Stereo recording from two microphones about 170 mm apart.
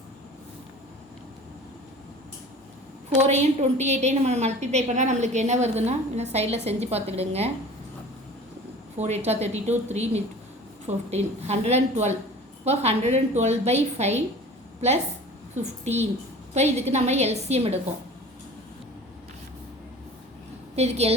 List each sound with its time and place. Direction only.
3.2 s a woman's voice: 40° right (ahead or behind)
9.0 s a woman's voice: 40° right (ahead or behind)
15.5 s a woman's voice: 40° right (ahead or behind)
20.7 s a woman's voice: 40° right (ahead or behind)